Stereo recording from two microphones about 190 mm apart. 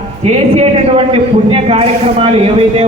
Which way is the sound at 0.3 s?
35° right (ahead or behind).